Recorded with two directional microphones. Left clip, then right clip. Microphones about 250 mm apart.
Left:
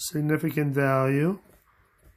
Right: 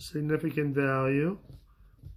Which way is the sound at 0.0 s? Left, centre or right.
Left.